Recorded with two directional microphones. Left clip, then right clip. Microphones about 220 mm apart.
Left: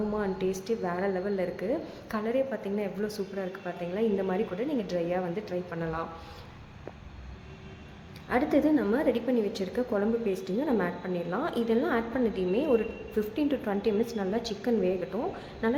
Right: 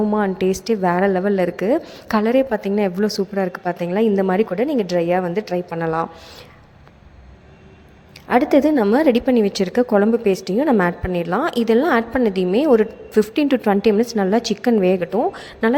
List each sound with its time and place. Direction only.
0.1 s a woman's voice: 40° right (ahead or behind)
8.3 s a woman's voice: 40° right (ahead or behind)